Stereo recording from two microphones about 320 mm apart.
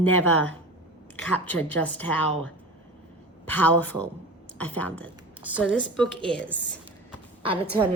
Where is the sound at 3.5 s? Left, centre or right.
Centre.